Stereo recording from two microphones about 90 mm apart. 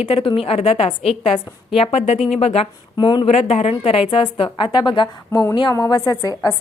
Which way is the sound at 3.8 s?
90° left.